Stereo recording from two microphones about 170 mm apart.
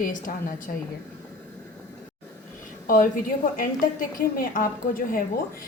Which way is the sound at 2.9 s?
55° left (ahead or behind).